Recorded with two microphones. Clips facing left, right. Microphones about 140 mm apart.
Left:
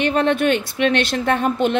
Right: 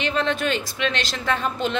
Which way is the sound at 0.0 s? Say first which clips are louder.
Left 6 dB; 55° left (ahead or behind).